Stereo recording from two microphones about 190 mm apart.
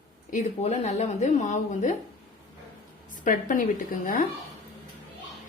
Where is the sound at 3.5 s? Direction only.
45° left (ahead or behind).